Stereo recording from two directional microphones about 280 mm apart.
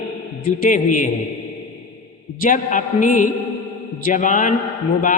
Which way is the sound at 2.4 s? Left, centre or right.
Left.